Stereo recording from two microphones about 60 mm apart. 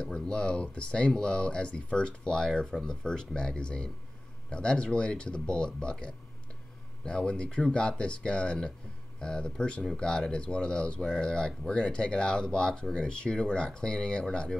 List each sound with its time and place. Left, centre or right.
0.0 s speech: centre